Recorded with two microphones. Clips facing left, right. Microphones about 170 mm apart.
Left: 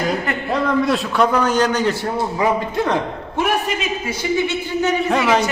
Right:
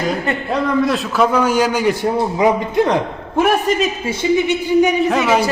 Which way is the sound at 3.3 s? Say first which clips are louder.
Right 6 dB; 40° right (ahead or behind).